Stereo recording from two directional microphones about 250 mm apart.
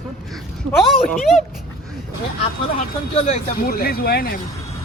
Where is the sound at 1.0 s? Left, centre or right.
Centre.